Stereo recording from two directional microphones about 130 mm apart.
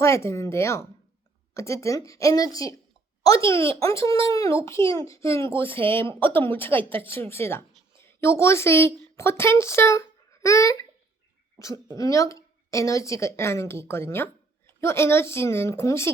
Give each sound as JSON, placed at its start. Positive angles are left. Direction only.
{"t": 0.0, "sound": "a woman's voice", "side_deg": 20}
{"t": 11.9, "sound": "a woman's voice", "side_deg": 25}